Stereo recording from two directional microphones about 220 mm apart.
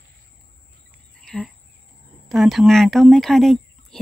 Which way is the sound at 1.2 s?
5° left (ahead or behind).